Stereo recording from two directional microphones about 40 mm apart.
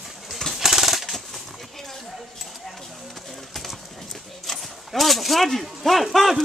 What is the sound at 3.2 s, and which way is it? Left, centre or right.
Horse, centre.